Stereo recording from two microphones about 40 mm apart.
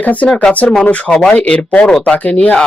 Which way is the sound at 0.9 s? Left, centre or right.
Left.